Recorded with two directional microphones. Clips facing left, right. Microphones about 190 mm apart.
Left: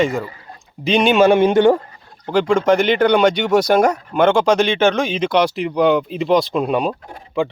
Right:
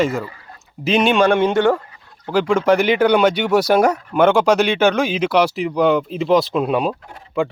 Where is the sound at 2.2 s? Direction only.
5° right (ahead or behind).